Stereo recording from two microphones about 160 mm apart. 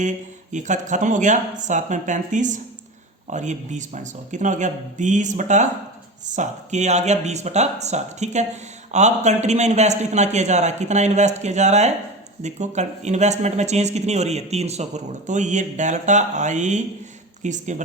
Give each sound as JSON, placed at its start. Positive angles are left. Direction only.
{"t": 0.5, "sound": "speech", "side_deg": -50}